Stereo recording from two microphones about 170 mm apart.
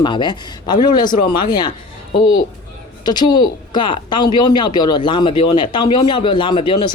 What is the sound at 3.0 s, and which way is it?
Speech, 25° left (ahead or behind).